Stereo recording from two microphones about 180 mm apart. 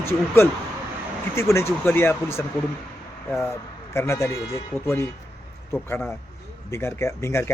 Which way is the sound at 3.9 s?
15° left (ahead or behind).